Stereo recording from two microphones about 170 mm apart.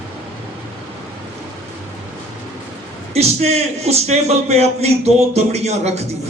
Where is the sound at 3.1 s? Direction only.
40° right (ahead or behind).